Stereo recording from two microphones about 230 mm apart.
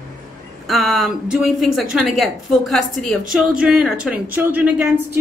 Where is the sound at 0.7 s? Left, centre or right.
Centre.